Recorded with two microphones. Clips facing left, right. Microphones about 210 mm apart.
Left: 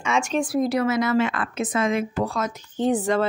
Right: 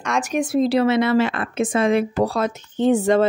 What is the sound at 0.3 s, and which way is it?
A woman's voice, 25° right (ahead or behind).